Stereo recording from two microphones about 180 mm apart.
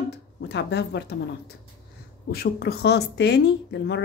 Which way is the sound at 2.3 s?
60° left (ahead or behind).